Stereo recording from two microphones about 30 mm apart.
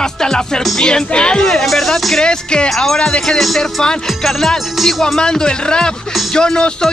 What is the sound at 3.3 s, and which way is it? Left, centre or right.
Speech, centre.